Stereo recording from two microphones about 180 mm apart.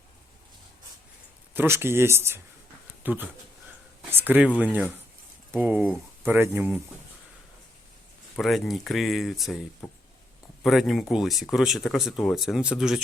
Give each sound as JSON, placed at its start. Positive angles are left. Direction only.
{"t": 1.5, "sound": "speech", "side_deg": -15}
{"t": 8.4, "sound": "speech", "side_deg": 0}